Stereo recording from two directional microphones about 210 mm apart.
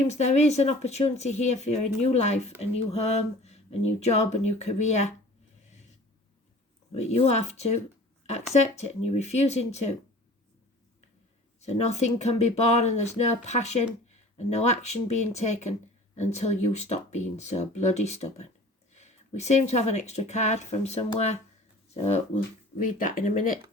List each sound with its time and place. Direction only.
0.1 s speech: 30° left (ahead or behind)
7.1 s speech: 30° left (ahead or behind)
11.6 s speech: 30° left (ahead or behind)